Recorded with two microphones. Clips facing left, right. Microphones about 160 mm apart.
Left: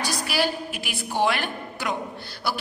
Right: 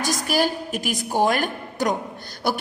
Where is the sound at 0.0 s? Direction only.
45° right (ahead or behind).